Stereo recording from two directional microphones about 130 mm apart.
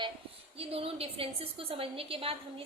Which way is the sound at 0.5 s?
50° right (ahead or behind).